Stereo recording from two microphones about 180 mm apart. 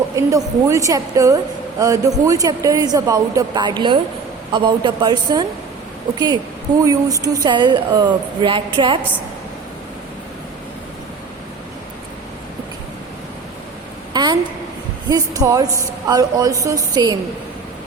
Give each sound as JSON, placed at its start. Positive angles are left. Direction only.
{"t": 0.2, "sound": "a woman's voice", "side_deg": -15}
{"t": 14.1, "sound": "a sound", "side_deg": -25}
{"t": 15.4, "sound": "speech", "side_deg": -20}